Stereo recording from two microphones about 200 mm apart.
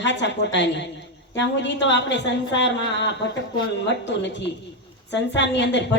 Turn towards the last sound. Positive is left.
turn(degrees=60)  # may be behind; listen again after turning